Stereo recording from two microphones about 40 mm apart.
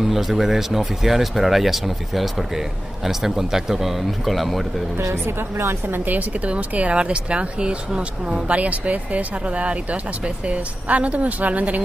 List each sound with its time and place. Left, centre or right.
0.0 s speech: centre
4.9 s a woman's voice: right
6.0 s speech: right
6.7 s speech: right
8.5 s speech: right